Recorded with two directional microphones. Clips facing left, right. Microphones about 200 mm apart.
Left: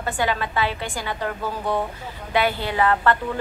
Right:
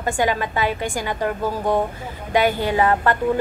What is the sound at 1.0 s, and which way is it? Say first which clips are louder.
Speech: right 3 dB; 15° right (ahead or behind).